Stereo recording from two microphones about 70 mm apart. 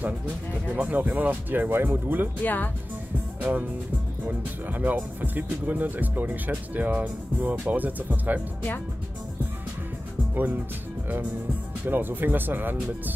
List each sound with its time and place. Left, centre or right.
0.7 s speech: right
2.4 s speech: left
3.3 s speech: right
10.3 s speech: right
11.8 s speech: right